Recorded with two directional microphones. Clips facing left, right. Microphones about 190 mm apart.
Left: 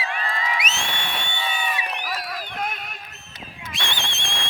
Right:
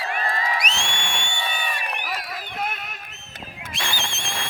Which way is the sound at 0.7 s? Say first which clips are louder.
Even; 5° left (ahead or behind).